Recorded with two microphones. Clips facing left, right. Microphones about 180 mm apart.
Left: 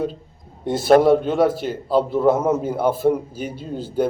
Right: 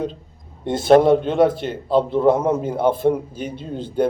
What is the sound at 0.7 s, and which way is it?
A man's voice, 5° left (ahead or behind).